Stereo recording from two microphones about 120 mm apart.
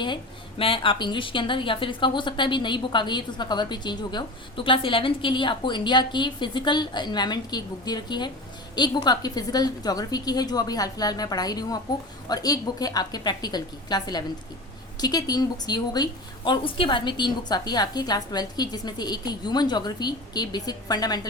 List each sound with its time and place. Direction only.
0.6 s a woman's voice: 45° left (ahead or behind)